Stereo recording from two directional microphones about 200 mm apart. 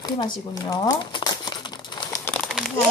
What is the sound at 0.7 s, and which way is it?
Crumpling, 20° left (ahead or behind).